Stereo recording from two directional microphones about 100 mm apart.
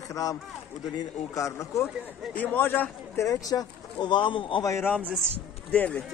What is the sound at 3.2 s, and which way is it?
Speech, 35° left (ahead or behind).